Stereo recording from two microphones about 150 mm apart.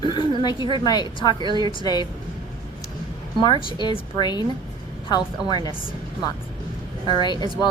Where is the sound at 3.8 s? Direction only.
30° left (ahead or behind).